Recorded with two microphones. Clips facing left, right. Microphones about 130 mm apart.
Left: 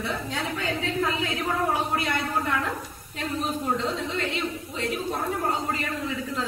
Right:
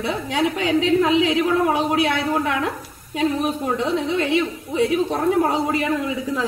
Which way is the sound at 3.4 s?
80° right.